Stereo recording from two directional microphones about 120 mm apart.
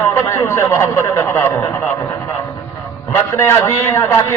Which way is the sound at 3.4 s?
20° left (ahead or behind).